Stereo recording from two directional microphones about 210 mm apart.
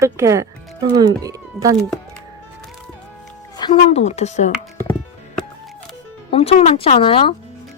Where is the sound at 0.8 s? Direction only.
15° right (ahead or behind).